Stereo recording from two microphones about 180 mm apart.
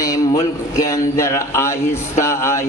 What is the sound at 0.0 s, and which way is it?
Speech, 20° left (ahead or behind).